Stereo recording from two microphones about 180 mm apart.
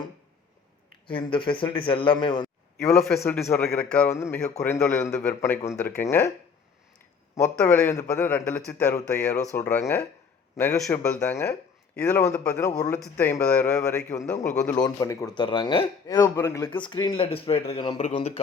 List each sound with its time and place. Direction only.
1.0 s a man's voice: 30° left (ahead or behind)
2.8 s a man's voice: 5° left (ahead or behind)
7.3 s a man's voice: 10° left (ahead or behind)
14.3 s a man's voice: 40° left (ahead or behind)
14.6 s a man's voice: 20° left (ahead or behind)
16.6 s a man's voice: 25° left (ahead or behind)